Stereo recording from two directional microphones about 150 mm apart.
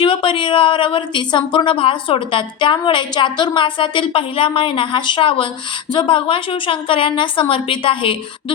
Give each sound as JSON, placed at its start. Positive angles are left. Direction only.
{"t": 0.0, "sound": "a woman's voice", "side_deg": 35}